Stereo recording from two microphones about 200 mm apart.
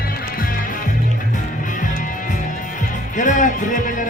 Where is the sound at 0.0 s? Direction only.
45° left (ahead or behind).